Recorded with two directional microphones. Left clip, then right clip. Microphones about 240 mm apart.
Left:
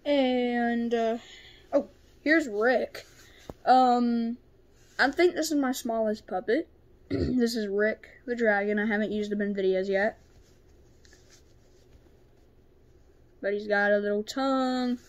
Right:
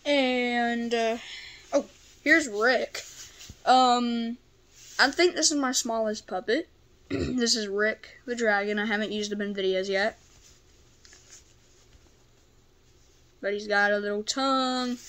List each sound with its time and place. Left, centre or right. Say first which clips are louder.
0.0 s a sound: right 1 dB; centre
2.2 s speech: right 2 dB; centre
13.4 s speech: right 1 dB; centre